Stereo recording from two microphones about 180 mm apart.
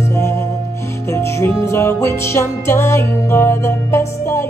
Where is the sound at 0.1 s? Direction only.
15° left (ahead or behind).